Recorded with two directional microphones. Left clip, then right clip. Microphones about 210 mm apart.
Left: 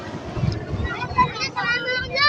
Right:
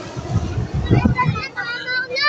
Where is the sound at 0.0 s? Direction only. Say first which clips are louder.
Right 2 dB; 15° right (ahead or behind).